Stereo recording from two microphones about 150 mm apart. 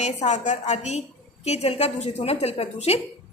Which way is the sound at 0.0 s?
50° left (ahead or behind).